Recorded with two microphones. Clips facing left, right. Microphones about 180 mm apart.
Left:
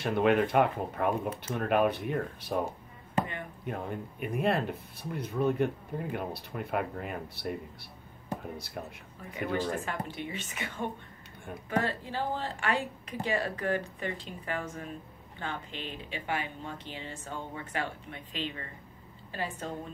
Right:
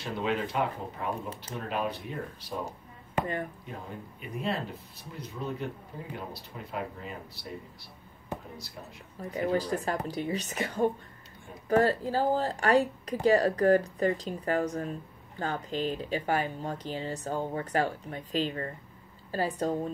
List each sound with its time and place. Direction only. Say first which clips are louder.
0.0 s speech: left 6 dB; 60° left (ahead or behind)
3.6 s speech: left 5 dB; 60° left (ahead or behind)
9.2 s speech: right 3 dB; 35° right (ahead or behind)